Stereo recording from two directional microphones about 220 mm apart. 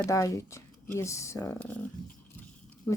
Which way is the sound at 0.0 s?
15° left (ahead or behind).